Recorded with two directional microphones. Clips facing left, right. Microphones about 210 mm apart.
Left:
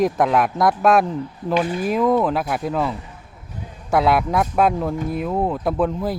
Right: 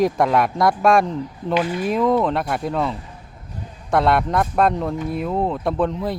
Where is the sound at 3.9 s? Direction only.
Centre (ahead or behind).